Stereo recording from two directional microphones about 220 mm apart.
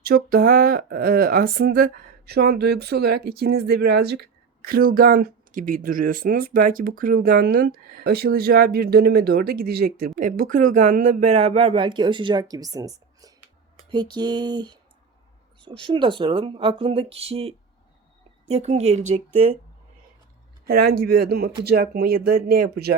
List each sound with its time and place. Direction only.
0.0 s speech: 40° right (ahead or behind); by 14.8 s 20° right (ahead or behind)
15.8 s speech: 20° right (ahead or behind)
20.7 s speech: 45° right (ahead or behind)